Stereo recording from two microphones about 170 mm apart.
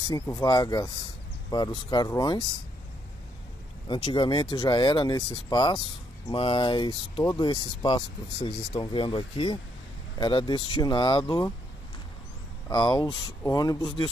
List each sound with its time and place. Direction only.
0.1 s speech: 20° left (ahead or behind)
3.9 s speech: 30° left (ahead or behind)
12.6 s speech: 25° left (ahead or behind)